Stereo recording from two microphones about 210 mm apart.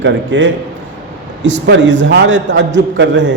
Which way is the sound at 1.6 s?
55° right (ahead or behind).